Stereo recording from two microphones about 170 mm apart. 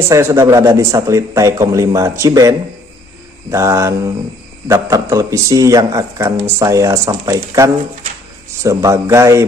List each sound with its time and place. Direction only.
0.1 s a man's voice: 15° right (ahead or behind)